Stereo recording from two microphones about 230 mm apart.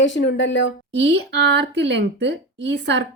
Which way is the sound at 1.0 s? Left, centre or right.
Right.